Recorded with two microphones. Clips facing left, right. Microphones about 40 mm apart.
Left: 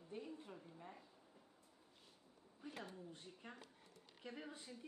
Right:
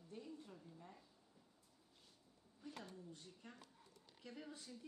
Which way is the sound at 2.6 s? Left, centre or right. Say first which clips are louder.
Left 2 dB; left.